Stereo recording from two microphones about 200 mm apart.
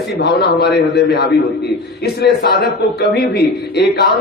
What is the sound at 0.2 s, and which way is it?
A man's voice, 55° left (ahead or behind).